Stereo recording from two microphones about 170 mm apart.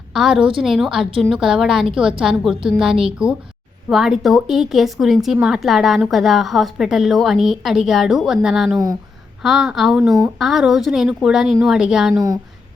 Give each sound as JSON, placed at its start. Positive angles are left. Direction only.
{"t": 0.1, "sound": "a woman's voice", "side_deg": -5}
{"t": 12.1, "sound": "speech", "side_deg": -20}